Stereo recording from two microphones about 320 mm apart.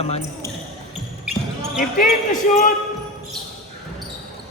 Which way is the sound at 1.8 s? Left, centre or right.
Left.